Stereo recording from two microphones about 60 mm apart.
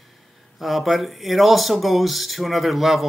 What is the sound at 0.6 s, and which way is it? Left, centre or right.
Speech, centre.